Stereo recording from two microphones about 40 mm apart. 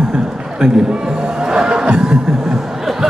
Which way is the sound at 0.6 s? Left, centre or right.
Centre.